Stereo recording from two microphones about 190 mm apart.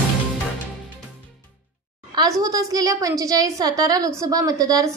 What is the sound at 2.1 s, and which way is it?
A woman's voice, 20° right (ahead or behind).